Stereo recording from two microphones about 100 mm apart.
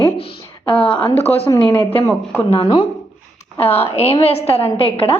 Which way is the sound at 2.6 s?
40° left (ahead or behind).